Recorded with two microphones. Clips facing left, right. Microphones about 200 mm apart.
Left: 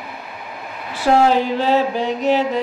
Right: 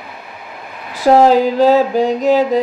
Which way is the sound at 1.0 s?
40° right (ahead or behind).